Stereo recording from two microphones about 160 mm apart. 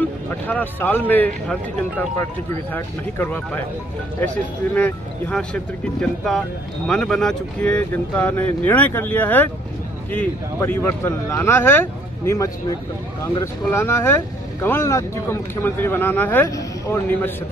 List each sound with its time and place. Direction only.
0.0 s speech: 10° left (ahead or behind)